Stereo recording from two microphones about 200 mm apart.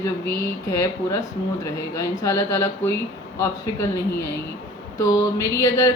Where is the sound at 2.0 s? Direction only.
15° left (ahead or behind).